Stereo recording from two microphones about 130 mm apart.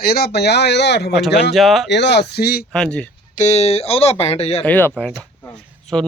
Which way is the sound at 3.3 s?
65° left (ahead or behind).